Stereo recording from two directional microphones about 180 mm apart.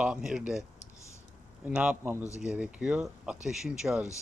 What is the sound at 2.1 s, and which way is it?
Speech, 15° left (ahead or behind).